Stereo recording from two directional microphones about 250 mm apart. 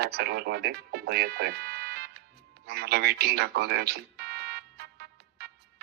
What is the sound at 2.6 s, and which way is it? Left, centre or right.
Music, right.